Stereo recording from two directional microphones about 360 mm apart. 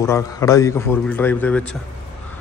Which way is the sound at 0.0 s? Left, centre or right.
Centre.